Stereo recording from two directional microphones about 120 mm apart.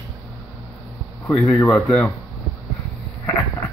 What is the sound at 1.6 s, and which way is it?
Speech, 10° left (ahead or behind).